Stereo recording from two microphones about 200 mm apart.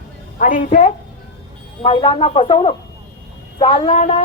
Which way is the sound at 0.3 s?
40° left (ahead or behind).